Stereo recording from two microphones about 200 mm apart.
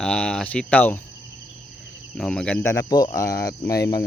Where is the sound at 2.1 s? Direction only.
5° left (ahead or behind).